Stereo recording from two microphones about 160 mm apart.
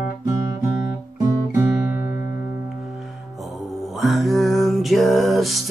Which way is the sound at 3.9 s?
Centre (ahead or behind).